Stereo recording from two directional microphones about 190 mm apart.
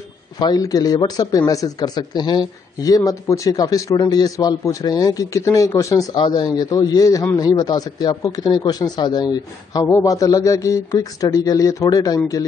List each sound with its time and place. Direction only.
0.4 s speech: 20° left (ahead or behind)